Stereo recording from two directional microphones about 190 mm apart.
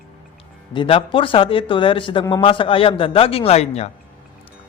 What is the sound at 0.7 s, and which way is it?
A man's voice, 25° left (ahead or behind).